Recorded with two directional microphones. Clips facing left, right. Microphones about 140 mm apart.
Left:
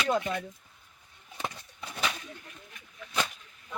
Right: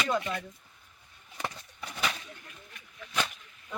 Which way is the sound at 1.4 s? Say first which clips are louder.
Even; 15° left (ahead or behind).